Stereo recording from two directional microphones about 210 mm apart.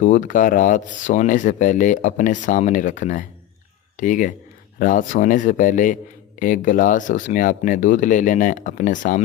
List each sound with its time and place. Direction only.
0.0 s speech: 35° left (ahead or behind)